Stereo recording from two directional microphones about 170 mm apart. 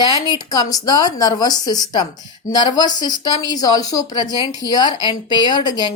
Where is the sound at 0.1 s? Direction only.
20° left (ahead or behind).